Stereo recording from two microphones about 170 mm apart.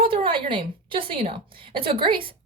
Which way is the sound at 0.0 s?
30° right (ahead or behind).